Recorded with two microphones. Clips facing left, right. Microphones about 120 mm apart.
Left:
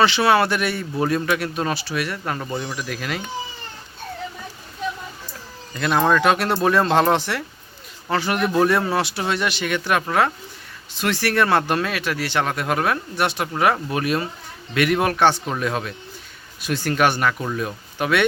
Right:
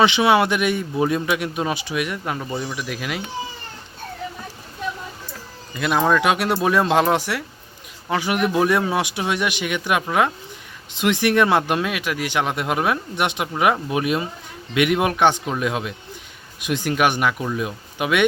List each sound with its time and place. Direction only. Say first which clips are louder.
0.0 s speech: right 1 dB; 15° right (ahead or behind)
2.4 s speech: even; centre (ahead or behind)
5.7 s speech: even; 5° right (ahead or behind)